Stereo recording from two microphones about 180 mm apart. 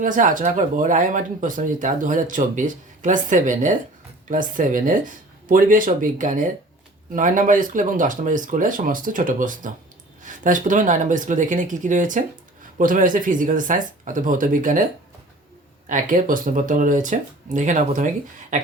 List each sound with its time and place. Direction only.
0.0 s speech: 45° right (ahead or behind)
15.9 s speech: 45° right (ahead or behind)